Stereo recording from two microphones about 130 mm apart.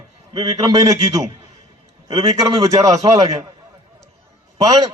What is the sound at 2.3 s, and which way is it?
Speech, 25° right (ahead or behind).